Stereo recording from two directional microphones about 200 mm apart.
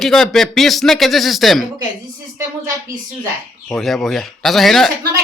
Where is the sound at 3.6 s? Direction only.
Centre (ahead or behind).